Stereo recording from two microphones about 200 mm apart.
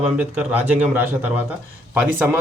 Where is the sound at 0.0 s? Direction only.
5° right (ahead or behind).